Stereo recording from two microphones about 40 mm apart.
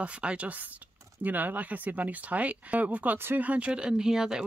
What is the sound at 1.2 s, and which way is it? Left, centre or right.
Speech, right.